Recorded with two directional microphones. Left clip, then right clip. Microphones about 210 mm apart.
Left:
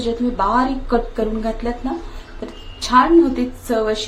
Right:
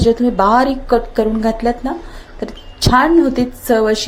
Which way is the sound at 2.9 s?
30° right (ahead or behind).